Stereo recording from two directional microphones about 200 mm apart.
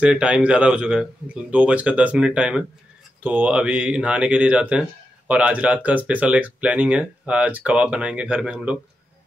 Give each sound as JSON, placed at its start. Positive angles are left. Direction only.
{"t": 0.0, "sound": "speech", "side_deg": -5}